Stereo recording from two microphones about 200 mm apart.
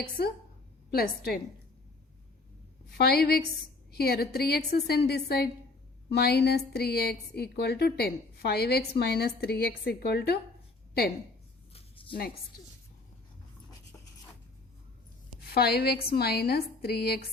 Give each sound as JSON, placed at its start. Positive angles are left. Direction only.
{"t": 0.9, "sound": "a woman's voice", "side_deg": 50}
{"t": 3.0, "sound": "a woman's voice", "side_deg": 50}
{"t": 11.7, "sound": "a sound", "side_deg": 25}
{"t": 15.4, "sound": "a woman's voice", "side_deg": 50}